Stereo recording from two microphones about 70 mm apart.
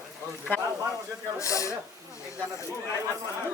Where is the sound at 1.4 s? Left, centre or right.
Left.